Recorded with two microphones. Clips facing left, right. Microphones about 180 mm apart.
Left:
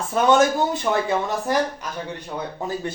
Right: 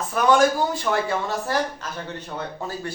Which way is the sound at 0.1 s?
25° left (ahead or behind).